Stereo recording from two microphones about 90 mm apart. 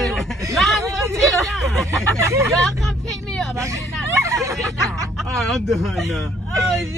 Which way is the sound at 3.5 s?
35° right (ahead or behind).